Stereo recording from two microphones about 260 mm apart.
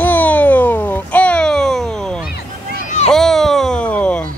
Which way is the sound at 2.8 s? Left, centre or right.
Left.